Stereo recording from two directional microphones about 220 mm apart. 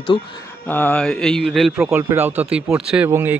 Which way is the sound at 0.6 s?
10° left (ahead or behind).